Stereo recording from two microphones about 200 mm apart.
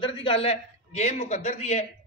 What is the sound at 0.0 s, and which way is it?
A man's voice, 30° left (ahead or behind).